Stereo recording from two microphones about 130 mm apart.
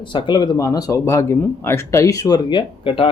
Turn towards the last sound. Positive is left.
turn(degrees=40)  # may be behind; listen again after turning